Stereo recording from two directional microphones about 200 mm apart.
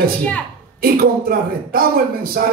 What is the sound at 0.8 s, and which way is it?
Speech, 45° right (ahead or behind).